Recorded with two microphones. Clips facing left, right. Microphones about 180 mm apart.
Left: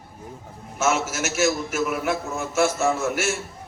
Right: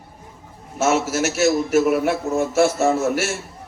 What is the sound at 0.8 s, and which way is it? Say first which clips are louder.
A man's voice: right 5 dB; 35° right (ahead or behind).